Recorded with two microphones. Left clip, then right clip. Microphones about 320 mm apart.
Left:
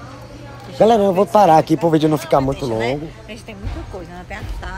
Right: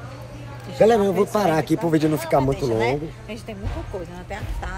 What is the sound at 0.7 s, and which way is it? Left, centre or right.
Speech, centre.